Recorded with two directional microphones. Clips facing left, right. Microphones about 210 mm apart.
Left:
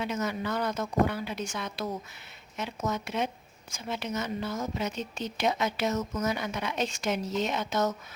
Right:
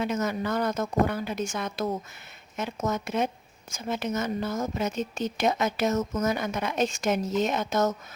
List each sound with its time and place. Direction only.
0.0 s a woman's voice: 45° right (ahead or behind)